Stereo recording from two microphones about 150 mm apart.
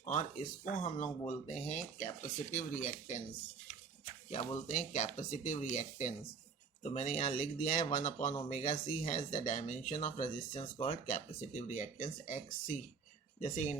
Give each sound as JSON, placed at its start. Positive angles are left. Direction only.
{"t": 0.0, "sound": "speech", "side_deg": 55}
{"t": 4.3, "sound": "speech", "side_deg": 50}